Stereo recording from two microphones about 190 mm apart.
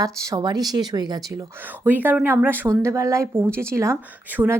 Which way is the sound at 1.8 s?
10° right (ahead or behind).